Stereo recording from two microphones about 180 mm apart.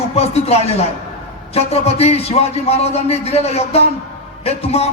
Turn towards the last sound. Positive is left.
turn(degrees=35)  # may be behind; listen again after turning